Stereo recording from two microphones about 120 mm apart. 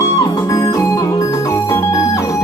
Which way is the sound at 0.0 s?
25° left (ahead or behind).